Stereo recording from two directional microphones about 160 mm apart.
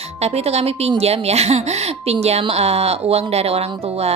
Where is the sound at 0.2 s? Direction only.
40° right (ahead or behind).